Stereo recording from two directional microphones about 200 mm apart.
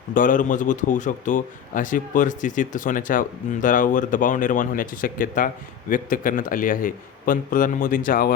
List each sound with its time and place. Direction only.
0.1 s a man's voice: 40° left (ahead or behind)